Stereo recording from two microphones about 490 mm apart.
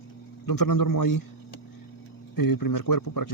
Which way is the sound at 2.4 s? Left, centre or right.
Left.